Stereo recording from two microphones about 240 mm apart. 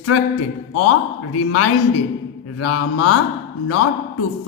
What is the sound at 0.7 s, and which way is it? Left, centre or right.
A man's voice, left.